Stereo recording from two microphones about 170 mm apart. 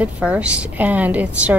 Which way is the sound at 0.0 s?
5° right (ahead or behind).